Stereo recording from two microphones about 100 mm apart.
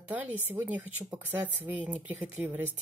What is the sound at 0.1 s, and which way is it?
Speech, 20° right (ahead or behind).